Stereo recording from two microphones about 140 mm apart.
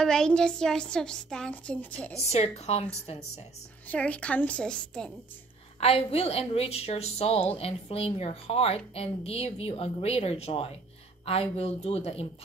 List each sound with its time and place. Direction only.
0.0 s a woman's voice: 5° left (ahead or behind)
2.3 s a woman's voice: 50° left (ahead or behind)
3.8 s a woman's voice: 10° left (ahead or behind)
5.8 s a woman's voice: 45° left (ahead or behind)